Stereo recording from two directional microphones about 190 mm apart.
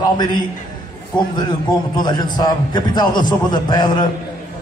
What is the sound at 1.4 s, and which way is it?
A man's voice, 25° left (ahead or behind).